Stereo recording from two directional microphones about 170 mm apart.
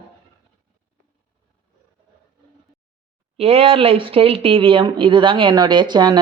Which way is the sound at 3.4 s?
35° right (ahead or behind).